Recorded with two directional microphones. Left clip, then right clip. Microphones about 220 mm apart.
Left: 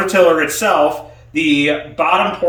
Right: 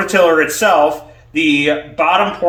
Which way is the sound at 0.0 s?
10° right (ahead or behind).